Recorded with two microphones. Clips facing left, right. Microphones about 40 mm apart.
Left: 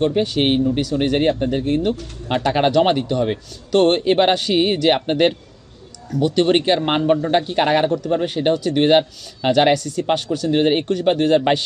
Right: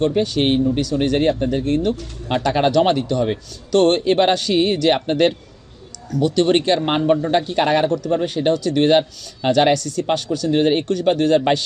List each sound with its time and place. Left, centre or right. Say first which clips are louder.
0.2 s a man's voice: even; left